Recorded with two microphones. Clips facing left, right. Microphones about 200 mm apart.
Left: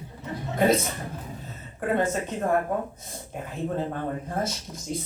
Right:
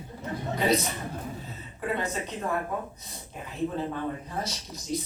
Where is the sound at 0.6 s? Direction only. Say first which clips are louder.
Left 4 dB; 50° left (ahead or behind).